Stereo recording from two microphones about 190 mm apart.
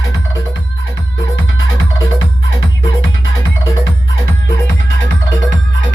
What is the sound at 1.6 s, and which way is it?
Music, 90° left.